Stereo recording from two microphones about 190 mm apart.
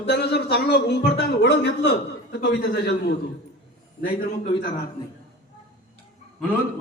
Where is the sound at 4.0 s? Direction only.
50° left (ahead or behind).